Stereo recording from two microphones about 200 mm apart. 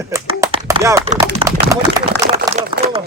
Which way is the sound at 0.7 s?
15° right (ahead or behind).